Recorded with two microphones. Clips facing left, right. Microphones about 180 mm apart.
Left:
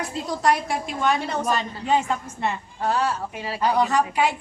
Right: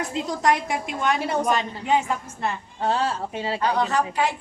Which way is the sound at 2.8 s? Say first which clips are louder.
Even; 25° right (ahead or behind).